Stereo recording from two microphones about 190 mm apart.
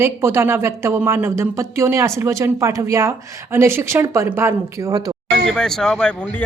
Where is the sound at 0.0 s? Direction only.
15° right (ahead or behind).